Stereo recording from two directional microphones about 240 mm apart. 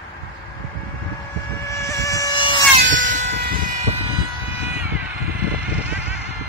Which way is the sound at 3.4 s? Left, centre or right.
Right.